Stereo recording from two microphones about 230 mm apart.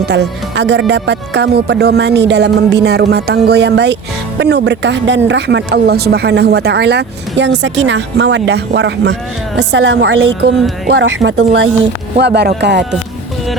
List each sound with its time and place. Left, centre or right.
0.0 s speech: right